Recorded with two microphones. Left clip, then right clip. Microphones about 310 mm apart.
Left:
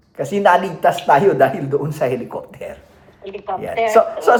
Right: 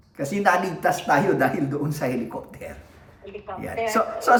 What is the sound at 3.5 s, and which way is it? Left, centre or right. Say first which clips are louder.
Speech: left 11 dB; left.